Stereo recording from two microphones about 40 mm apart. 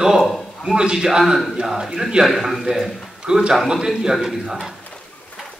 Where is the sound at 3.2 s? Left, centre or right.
Right.